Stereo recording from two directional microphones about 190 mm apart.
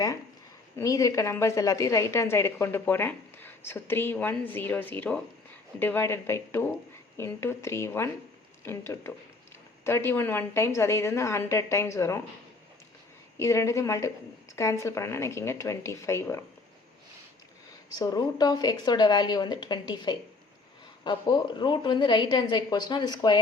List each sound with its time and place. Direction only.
0.8 s a woman's voice: 15° left (ahead or behind)
13.3 s a woman's voice: 15° left (ahead or behind)
17.9 s a woman's voice: 20° left (ahead or behind)